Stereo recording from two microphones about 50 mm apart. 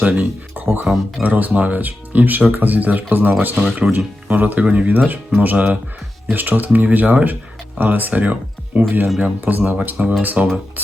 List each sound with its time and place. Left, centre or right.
0.0 s speech: right
0.5 s music: right
1.2 s speech: right
8.8 s speech: right